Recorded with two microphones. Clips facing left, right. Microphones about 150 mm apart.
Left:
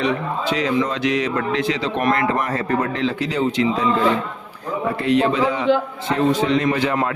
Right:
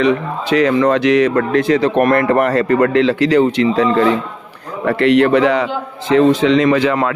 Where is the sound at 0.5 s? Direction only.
65° right (ahead or behind).